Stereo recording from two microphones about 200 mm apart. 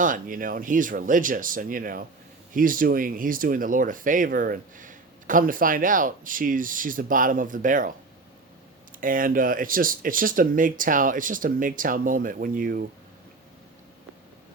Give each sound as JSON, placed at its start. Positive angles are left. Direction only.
{"t": 0.0, "sound": "speech", "side_deg": -40}
{"t": 9.0, "sound": "speech", "side_deg": -45}